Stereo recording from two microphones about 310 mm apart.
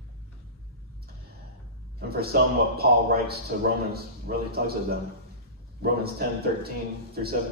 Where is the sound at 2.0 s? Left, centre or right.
Right.